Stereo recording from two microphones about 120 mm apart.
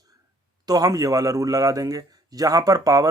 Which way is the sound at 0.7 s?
30° right (ahead or behind).